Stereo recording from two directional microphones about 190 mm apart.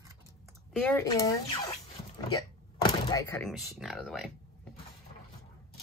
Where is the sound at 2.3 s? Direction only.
20° left (ahead or behind).